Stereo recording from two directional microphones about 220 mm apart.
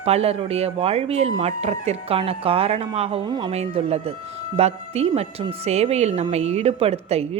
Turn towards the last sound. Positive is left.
turn(degrees=-25)  # may be behind; listen again after turning